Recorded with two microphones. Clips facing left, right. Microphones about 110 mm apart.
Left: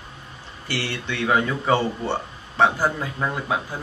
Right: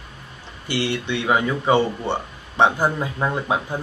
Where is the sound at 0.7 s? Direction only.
15° right (ahead or behind).